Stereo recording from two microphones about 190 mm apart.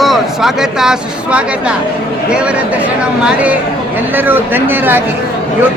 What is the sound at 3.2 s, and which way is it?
Speech, 5° right (ahead or behind).